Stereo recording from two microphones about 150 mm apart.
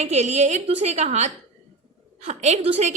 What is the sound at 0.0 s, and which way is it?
A woman's voice, 50° right (ahead or behind).